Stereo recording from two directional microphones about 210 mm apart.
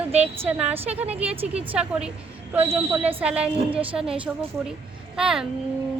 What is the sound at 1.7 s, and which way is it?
Speech, 5° right (ahead or behind).